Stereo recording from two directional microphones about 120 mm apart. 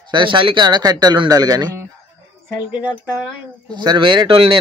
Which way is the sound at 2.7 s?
10° right (ahead or behind).